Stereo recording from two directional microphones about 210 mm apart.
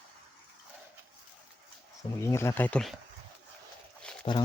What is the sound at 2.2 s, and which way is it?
Speech, 15° left (ahead or behind).